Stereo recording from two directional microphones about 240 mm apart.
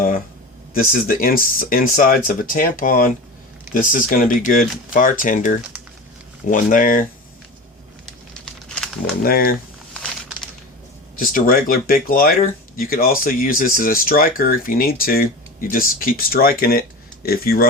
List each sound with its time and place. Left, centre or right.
0.7 s speech: left
8.4 s crumpling: centre
9.2 s speech: left
9.9 s a sound: centre
11.2 s speech: left